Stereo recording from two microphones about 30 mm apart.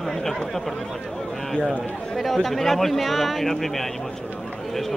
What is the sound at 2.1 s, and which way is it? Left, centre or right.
Speech, centre.